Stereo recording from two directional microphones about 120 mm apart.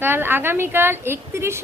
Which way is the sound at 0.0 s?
20° right (ahead or behind).